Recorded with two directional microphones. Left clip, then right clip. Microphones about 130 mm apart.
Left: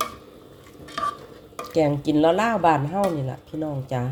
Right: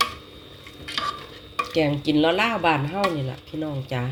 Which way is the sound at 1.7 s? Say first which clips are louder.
Left 2 dB; 15° left (ahead or behind).